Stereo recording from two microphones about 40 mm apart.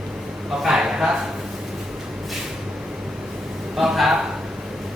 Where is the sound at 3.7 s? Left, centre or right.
Centre.